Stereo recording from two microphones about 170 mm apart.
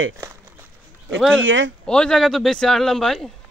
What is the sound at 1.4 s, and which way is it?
Speech, 90° right.